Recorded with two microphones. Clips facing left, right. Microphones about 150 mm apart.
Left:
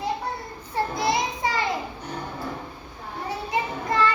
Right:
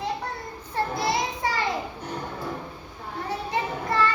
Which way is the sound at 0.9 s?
15° left (ahead or behind).